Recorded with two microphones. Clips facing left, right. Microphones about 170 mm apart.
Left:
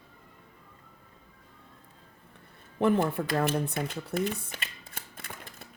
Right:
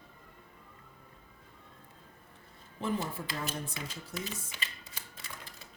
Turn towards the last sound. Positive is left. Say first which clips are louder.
# left 4 dB
turn(degrees=55)  # may be behind; listen again after turning